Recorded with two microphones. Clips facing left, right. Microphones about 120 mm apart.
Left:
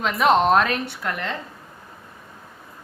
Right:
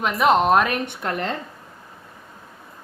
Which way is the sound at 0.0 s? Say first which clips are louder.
Even; 5° right (ahead or behind).